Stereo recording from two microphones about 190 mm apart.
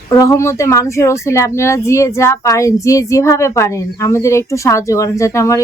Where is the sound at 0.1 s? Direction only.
15° left (ahead or behind).